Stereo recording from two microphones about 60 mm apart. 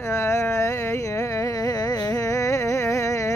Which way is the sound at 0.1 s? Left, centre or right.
Left.